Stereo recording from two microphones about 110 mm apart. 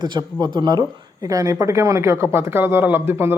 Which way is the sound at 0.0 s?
40° right (ahead or behind).